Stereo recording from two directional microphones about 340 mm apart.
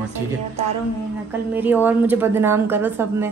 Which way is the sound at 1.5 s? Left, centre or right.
Centre.